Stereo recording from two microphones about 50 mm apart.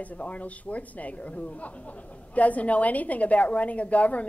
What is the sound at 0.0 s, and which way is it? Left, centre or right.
Speech, left.